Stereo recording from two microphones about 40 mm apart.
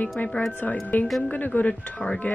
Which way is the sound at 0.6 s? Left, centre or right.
Left.